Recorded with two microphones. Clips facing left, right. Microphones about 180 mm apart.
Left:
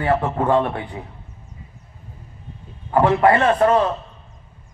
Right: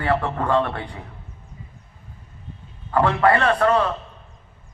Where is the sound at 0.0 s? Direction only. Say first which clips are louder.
Left 3 dB; 20° left (ahead or behind).